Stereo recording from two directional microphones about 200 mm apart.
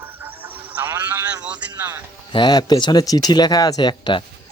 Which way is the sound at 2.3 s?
20° left (ahead or behind).